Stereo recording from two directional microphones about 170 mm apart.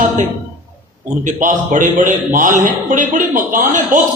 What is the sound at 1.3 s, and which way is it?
A man's voice, 50° right (ahead or behind).